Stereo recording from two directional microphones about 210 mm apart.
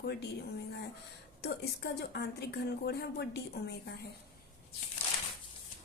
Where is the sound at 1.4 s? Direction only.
50° left (ahead or behind).